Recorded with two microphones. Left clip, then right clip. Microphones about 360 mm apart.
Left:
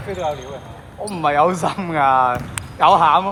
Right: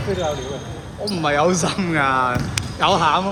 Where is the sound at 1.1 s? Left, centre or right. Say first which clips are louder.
Left 2 dB; centre.